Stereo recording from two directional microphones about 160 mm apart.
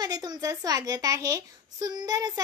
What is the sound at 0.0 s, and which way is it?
A woman's voice, 25° right (ahead or behind).